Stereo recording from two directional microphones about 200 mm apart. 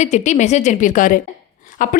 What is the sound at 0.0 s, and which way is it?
A woman's voice, 35° left (ahead or behind).